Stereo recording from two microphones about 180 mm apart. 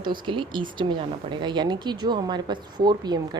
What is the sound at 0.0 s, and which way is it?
Speech, 25° right (ahead or behind).